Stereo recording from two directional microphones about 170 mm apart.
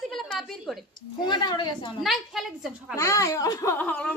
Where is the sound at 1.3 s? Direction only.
25° left (ahead or behind).